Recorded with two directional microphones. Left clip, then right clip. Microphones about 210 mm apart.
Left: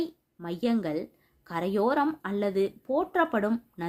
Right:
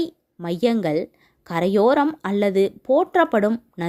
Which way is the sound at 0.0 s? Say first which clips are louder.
Right 7 dB; 40° right (ahead or behind).